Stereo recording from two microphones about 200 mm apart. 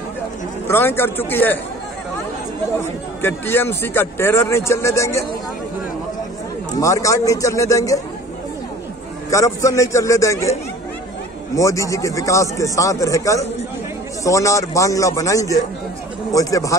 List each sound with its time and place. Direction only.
0.7 s speech: 10° left (ahead or behind)
3.2 s speech: 10° left (ahead or behind)
6.7 s speech: 15° left (ahead or behind)
9.3 s speech: 15° left (ahead or behind)
11.5 s speech: 15° left (ahead or behind)